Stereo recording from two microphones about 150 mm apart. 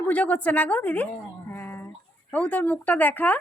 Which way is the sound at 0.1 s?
10° left (ahead or behind).